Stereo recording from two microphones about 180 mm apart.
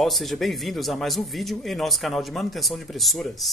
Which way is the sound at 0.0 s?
Centre (ahead or behind).